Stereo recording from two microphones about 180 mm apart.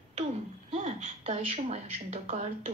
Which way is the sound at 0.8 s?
35° right (ahead or behind).